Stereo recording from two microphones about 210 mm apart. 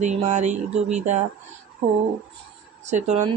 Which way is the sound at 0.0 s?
35° right (ahead or behind).